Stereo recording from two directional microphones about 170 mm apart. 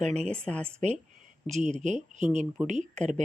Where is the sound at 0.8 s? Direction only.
45° right (ahead or behind).